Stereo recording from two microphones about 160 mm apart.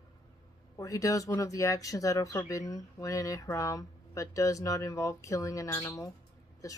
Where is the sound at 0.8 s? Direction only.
20° left (ahead or behind).